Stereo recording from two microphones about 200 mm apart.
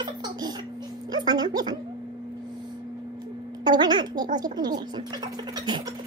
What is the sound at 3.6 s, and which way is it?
Speech, 20° right (ahead or behind).